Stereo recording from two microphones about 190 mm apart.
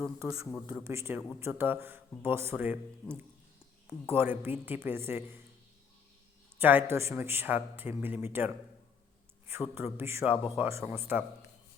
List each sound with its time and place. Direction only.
0.2 s a man's voice: 15° right (ahead or behind)
6.6 s a man's voice: 10° right (ahead or behind)
9.7 s a man's voice: 10° right (ahead or behind)